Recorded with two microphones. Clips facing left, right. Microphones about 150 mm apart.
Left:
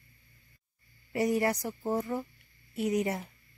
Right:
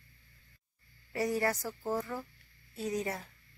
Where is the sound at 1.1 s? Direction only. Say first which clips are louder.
Left 4 dB; 20° left (ahead or behind).